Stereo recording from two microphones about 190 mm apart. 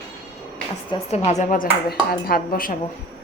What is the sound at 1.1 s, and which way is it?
A woman's voice, 35° left (ahead or behind).